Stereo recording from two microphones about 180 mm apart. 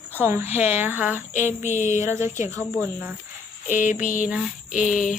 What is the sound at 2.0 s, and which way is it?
Cricket, 15° right (ahead or behind).